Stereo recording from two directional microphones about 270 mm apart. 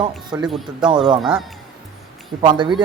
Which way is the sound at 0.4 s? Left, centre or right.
Centre.